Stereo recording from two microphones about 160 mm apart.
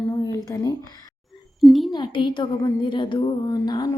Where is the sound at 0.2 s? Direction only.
20° left (ahead or behind).